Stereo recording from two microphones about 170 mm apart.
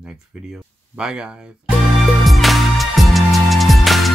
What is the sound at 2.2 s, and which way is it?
Music, centre (ahead or behind).